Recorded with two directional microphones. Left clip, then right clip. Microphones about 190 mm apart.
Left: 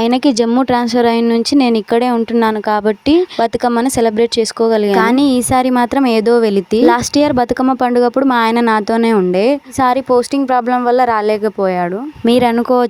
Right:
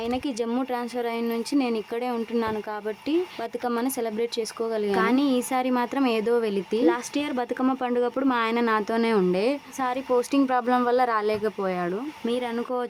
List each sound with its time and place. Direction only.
0.0 s speech: 45° left (ahead or behind)